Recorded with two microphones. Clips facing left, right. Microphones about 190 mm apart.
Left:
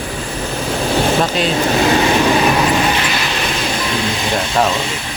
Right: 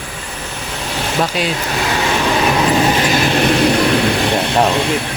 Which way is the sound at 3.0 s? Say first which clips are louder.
Right 6 dB; 45° right (ahead or behind).